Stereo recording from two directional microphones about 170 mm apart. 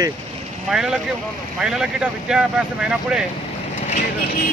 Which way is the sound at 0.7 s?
5° right (ahead or behind).